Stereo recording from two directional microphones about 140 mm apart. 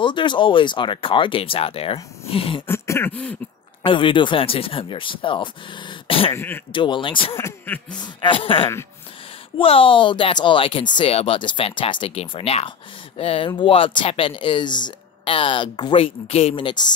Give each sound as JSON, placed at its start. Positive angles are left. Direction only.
{"t": 0.0, "sound": "speech", "side_deg": 35}
{"t": 2.6, "sound": "throat clearing", "side_deg": 15}
{"t": 3.8, "sound": "speech", "side_deg": 35}
{"t": 6.3, "sound": "throat clearing", "side_deg": 15}
{"t": 6.7, "sound": "speech", "side_deg": 35}
{"t": 7.3, "sound": "throat clearing", "side_deg": 15}
{"t": 8.0, "sound": "speech", "side_deg": 35}